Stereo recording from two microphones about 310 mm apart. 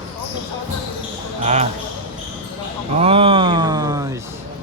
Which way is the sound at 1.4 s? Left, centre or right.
Right.